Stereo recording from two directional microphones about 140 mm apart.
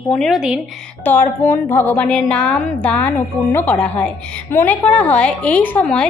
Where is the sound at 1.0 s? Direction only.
15° left (ahead or behind).